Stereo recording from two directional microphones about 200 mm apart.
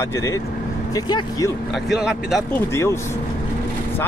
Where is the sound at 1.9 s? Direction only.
Centre (ahead or behind).